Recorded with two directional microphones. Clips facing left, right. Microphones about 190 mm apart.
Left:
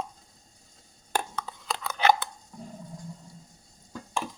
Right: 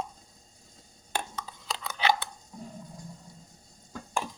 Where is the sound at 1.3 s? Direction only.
55° left (ahead or behind).